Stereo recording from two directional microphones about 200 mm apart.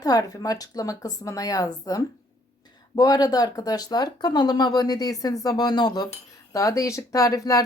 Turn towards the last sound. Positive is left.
turn(degrees=15)  # may be behind; listen again after turning